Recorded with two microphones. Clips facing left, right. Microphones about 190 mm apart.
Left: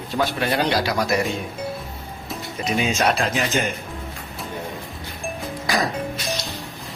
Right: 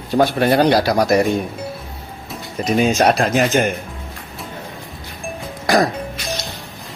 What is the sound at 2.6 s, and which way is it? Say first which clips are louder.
Speech: right 6 dB; 45° right (ahead or behind).